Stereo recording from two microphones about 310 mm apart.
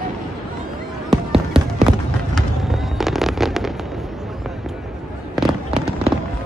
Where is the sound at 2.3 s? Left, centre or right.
Centre.